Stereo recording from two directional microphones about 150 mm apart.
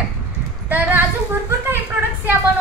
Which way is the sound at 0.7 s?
10° right (ahead or behind).